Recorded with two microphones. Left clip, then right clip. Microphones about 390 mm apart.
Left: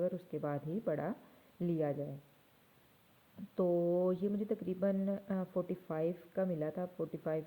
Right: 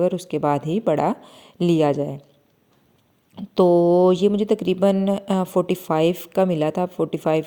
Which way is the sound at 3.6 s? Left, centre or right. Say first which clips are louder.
Right 17 dB; right.